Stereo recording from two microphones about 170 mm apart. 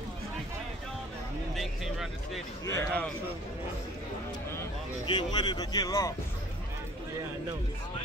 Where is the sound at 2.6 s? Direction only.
15° left (ahead or behind).